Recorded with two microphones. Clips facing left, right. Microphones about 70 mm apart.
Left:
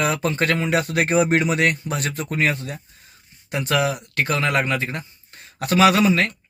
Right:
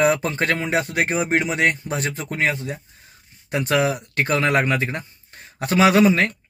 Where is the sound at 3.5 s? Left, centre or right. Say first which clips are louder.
Right 1 dB; right.